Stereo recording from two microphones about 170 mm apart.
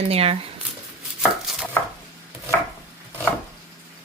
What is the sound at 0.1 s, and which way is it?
Speech, 35° right (ahead or behind).